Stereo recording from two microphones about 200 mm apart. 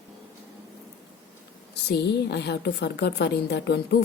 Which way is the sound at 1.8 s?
55° left (ahead or behind).